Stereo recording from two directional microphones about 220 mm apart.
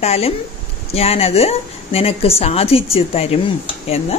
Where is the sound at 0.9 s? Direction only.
25° left (ahead or behind).